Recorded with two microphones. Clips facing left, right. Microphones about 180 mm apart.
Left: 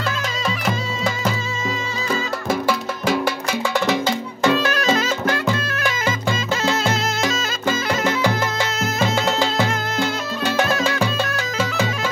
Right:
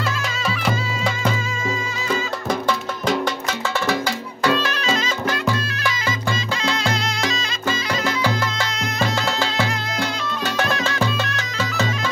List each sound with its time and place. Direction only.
0.7 s music: centre (ahead or behind)
3.8 s music: 20° left (ahead or behind)
8.0 s music: 20° left (ahead or behind)